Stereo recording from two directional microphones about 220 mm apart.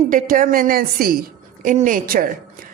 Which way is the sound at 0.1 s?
35° right (ahead or behind).